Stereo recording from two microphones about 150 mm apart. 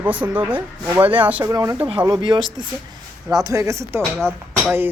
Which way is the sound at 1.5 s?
20° right (ahead or behind).